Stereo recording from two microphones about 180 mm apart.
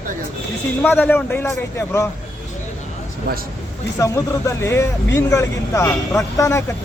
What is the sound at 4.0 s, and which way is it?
Speech, 15° left (ahead or behind).